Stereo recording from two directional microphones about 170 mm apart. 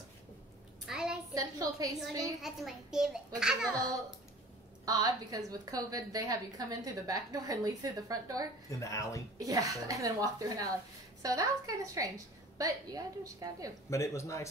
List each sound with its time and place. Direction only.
0.8 s a sound: 5° right (ahead or behind)
1.3 s a sound: 20° right (ahead or behind)
2.4 s a child's voice: centre (ahead or behind)
4.8 s a woman's voice: 20° right (ahead or behind)
8.6 s speech: 20° left (ahead or behind)
9.4 s a woman's voice: 20° right (ahead or behind)
13.8 s speech: 15° left (ahead or behind)